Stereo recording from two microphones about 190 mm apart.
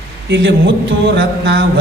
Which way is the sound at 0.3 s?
70° right (ahead or behind).